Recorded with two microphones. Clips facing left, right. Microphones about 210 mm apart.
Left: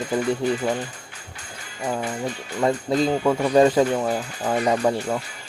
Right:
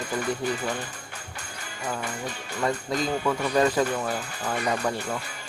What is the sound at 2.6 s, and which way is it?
Speech, 30° left (ahead or behind).